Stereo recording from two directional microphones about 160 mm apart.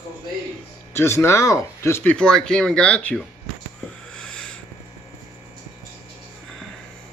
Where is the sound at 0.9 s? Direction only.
15° left (ahead or behind).